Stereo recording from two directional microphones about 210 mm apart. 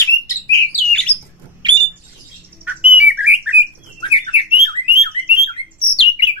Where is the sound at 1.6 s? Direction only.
20° right (ahead or behind).